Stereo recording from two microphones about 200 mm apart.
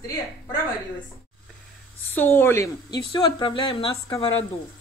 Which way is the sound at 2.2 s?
10° left (ahead or behind).